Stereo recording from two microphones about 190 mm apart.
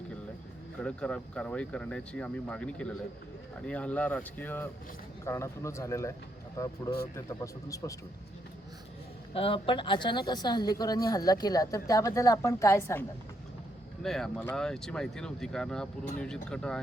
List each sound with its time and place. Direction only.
0.8 s speech: 5° left (ahead or behind)
9.3 s a woman's voice: 30° left (ahead or behind); by 13.1 s 15° left (ahead or behind)
14.0 s speech: centre (ahead or behind)